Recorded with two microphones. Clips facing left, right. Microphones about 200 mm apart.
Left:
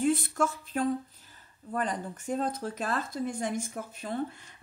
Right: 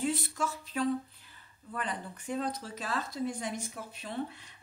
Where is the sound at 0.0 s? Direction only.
50° left (ahead or behind).